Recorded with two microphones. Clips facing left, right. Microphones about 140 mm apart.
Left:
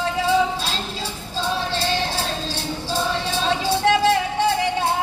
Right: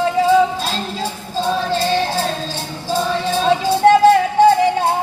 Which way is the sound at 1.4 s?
50° right (ahead or behind).